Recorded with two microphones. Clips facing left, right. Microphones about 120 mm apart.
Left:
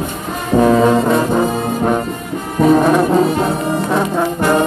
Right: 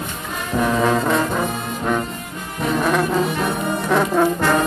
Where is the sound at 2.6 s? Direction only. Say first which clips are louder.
Left 10 dB; 45° left (ahead or behind).